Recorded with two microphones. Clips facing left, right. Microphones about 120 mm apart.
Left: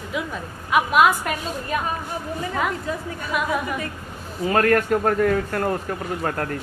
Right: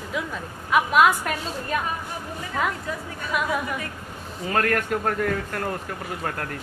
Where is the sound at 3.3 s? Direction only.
5° left (ahead or behind).